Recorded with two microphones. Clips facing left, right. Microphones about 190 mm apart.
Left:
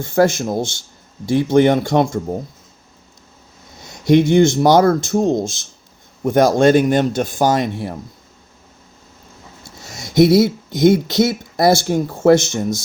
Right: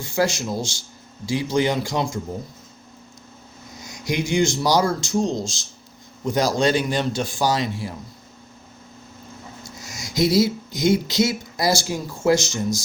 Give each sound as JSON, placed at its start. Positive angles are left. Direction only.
{"t": 0.0, "sound": "speech", "side_deg": 55}
{"t": 3.8, "sound": "a sound", "side_deg": 65}
{"t": 4.3, "sound": "speech", "side_deg": 60}
{"t": 10.2, "sound": "speech", "side_deg": 55}